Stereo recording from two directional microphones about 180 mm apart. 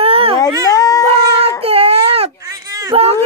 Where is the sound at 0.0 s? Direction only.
30° right (ahead or behind).